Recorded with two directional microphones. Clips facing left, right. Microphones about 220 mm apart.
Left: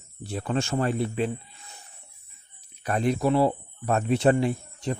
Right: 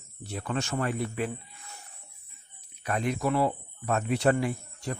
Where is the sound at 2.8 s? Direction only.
35° left (ahead or behind).